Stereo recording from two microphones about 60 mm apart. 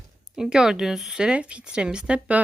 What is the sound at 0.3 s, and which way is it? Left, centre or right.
Speech, centre.